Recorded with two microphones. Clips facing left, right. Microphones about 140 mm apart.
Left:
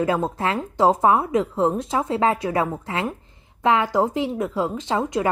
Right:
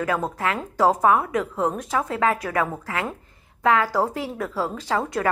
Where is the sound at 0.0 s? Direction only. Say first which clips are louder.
Left 3 dB; 25° left (ahead or behind).